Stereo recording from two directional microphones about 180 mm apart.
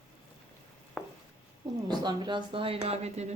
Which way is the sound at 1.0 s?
Centre (ahead or behind).